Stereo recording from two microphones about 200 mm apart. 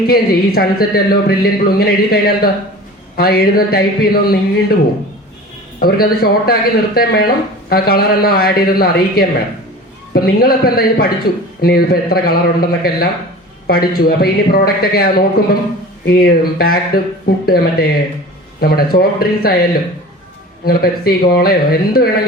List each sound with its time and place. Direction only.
0.1 s a man's voice: 50° left (ahead or behind)
5.8 s a man's voice: 50° left (ahead or behind)
20.7 s a man's voice: 50° left (ahead or behind)